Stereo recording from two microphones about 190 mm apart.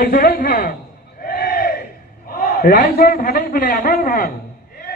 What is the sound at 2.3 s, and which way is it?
A man's voice, 50° left (ahead or behind).